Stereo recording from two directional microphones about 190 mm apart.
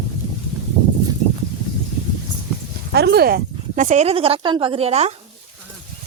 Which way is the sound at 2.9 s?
60° right (ahead or behind).